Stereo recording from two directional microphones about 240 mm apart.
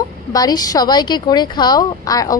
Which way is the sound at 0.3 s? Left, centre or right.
Centre.